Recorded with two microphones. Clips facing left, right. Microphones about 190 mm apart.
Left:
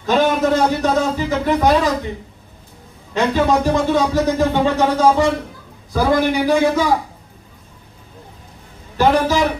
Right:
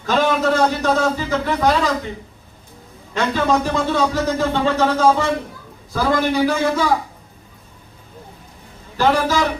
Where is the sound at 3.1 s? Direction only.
15° left (ahead or behind).